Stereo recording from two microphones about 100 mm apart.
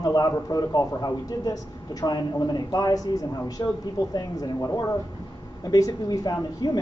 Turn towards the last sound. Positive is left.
turn(degrees=40)  # may be behind; listen again after turning